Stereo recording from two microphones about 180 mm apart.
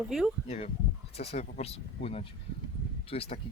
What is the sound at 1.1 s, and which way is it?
Speech, 35° left (ahead or behind).